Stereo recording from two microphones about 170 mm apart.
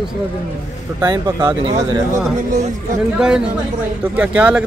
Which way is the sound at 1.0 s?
25° right (ahead or behind).